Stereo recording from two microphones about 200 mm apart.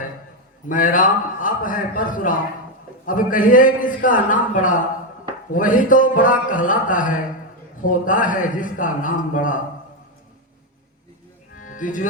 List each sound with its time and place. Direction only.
0.7 s a man's voice: 40° left (ahead or behind)
11.7 s speech: 40° left (ahead or behind)